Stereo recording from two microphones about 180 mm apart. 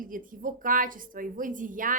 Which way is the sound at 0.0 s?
50° right (ahead or behind).